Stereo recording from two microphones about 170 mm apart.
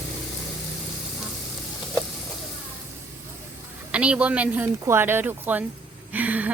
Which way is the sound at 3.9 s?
5° right (ahead or behind).